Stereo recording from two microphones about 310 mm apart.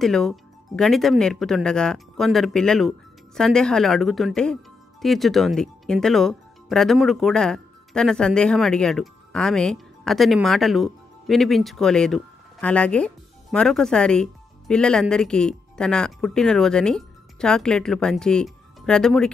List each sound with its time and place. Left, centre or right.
0.0 s speech: centre